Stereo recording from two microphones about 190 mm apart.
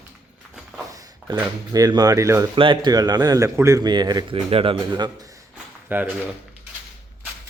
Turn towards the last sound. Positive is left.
turn(degrees=-10)  # may be behind; listen again after turning